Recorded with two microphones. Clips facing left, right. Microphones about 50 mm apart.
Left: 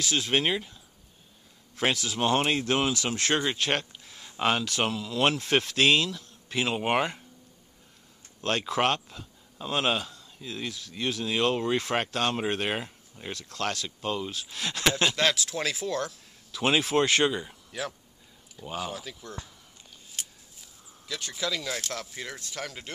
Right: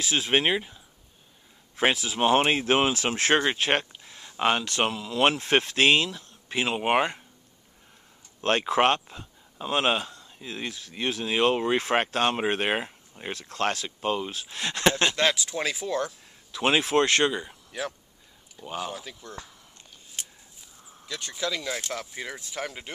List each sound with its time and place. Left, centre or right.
0.0 s speech: centre
8.4 s speech: right